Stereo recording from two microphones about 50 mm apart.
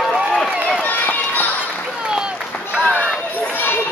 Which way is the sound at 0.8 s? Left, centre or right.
Left.